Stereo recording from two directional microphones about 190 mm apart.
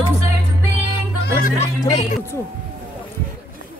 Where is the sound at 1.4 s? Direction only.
35° left (ahead or behind).